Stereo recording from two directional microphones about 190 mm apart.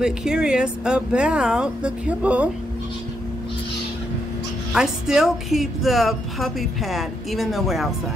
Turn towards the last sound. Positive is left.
turn(degrees=0)  # may be behind; listen again after turning